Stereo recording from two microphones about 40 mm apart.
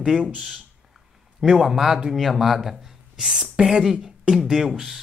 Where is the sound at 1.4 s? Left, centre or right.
Centre.